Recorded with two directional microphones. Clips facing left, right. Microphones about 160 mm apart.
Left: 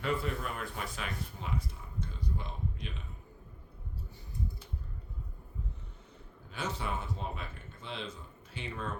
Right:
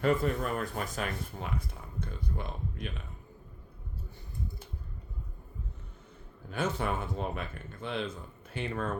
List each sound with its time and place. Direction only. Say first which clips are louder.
0.0 s speech: right 6 dB; 45° right (ahead or behind)
6.5 s speech: right 5 dB; 55° right (ahead or behind)